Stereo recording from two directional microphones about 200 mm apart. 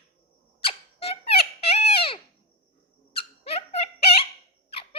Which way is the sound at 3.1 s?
30° left (ahead or behind).